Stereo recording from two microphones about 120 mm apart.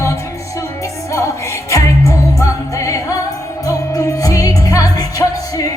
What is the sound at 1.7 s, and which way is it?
Music, 25° left (ahead or behind).